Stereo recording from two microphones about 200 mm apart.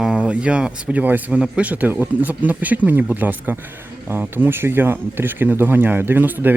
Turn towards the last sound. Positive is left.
turn(degrees=-10)  # may be behind; listen again after turning